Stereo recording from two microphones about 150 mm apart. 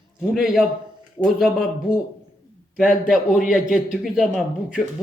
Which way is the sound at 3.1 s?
5° right (ahead or behind).